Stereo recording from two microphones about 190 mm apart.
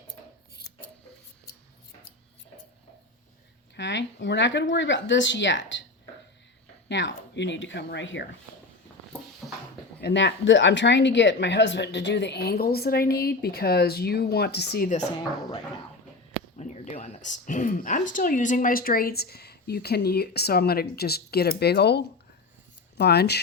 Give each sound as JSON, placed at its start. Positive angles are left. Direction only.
{"t": 3.8, "sound": "speech", "side_deg": 70}
{"t": 6.8, "sound": "speech", "side_deg": 70}
{"t": 9.4, "sound": "a sound", "side_deg": 0}
{"t": 10.0, "sound": "speech", "side_deg": 65}
{"t": 16.6, "sound": "a sound", "side_deg": 35}
{"t": 18.1, "sound": "speech", "side_deg": 45}